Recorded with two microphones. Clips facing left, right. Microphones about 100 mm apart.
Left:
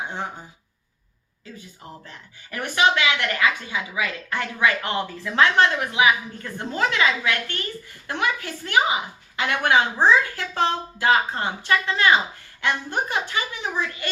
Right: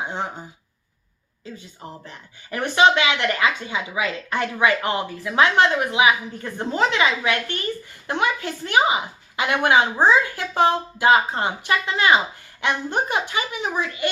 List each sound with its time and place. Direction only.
2.0 s a woman's voice: 20° right (ahead or behind)